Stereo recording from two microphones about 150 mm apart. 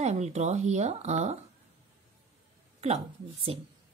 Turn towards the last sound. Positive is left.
turn(degrees=-40)  # may be behind; listen again after turning